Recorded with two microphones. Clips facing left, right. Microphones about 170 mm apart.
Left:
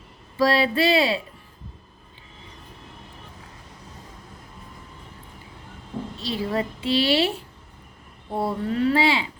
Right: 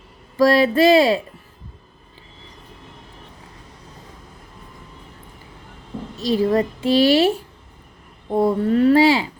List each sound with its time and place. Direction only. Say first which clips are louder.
0.3 s a woman's voice: right 6 dB; 45° right (ahead or behind)
6.1 s a woman's voice: right 9 dB; 45° right (ahead or behind)